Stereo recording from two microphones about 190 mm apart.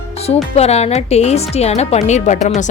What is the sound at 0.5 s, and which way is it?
Speech, 35° left (ahead or behind).